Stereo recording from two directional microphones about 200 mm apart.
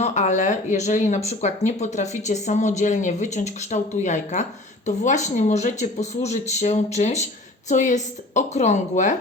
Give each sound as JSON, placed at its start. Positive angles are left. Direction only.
{"t": 0.0, "sound": "speech", "side_deg": 35}